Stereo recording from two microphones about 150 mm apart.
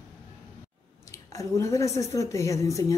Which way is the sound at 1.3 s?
20° left (ahead or behind).